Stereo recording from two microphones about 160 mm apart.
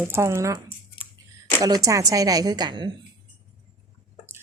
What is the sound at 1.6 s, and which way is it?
A woman's voice, 20° right (ahead or behind).